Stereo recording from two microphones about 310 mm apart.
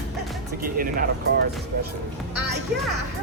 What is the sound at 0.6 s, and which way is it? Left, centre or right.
Speech, right.